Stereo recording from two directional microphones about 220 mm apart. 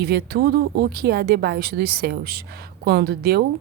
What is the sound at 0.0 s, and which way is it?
Speech, 45° right (ahead or behind).